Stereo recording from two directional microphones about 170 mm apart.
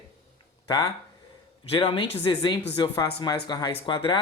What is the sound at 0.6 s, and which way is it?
Speech, 25° left (ahead or behind).